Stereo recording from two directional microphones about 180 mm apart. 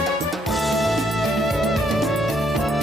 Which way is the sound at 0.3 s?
Centre (ahead or behind).